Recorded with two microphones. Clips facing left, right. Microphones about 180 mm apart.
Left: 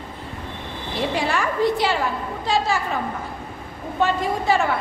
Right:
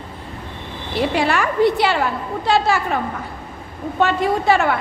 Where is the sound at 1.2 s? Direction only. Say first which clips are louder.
Right 5 dB; 70° right (ahead or behind).